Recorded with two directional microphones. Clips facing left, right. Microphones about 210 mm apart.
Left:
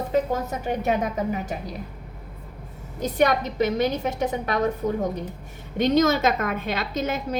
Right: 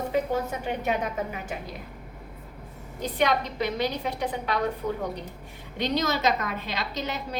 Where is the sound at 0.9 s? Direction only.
40° left (ahead or behind).